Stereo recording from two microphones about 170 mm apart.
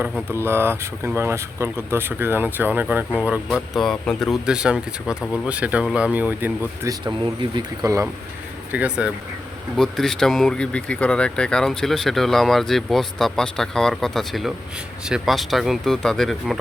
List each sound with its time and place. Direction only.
0.0 s speech: 15° right (ahead or behind)
7.0 s speech: 25° right (ahead or behind)
8.7 s speech: 10° right (ahead or behind)